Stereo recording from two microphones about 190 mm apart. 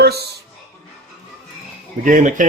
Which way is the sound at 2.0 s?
40° right (ahead or behind).